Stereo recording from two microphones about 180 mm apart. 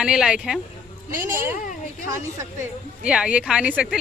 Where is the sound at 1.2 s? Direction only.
15° right (ahead or behind).